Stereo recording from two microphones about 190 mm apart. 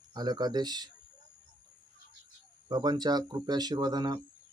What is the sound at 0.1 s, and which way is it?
Speech, 20° right (ahead or behind).